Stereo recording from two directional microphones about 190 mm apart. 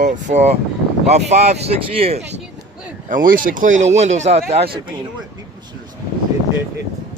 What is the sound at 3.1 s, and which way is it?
Speech, 45° right (ahead or behind).